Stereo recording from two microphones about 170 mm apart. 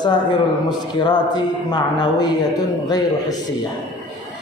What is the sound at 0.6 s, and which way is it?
Speech, 25° left (ahead or behind).